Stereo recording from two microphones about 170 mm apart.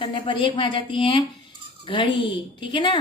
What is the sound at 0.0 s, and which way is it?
A woman's voice, 30° left (ahead or behind).